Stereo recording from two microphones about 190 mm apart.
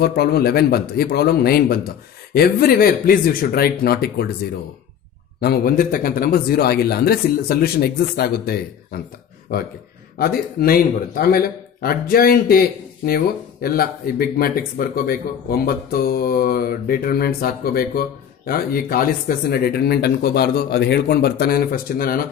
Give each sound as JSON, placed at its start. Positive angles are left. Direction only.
{"t": 0.0, "sound": "speech", "side_deg": 55}
{"t": 5.4, "sound": "speech", "side_deg": 50}
{"t": 10.2, "sound": "speech", "side_deg": 55}